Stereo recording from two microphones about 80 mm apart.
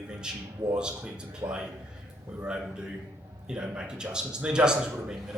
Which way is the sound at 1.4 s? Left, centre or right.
Right.